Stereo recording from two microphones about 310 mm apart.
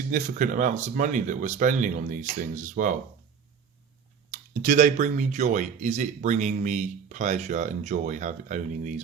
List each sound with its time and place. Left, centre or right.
0.1 s speech: right
4.3 s speech: right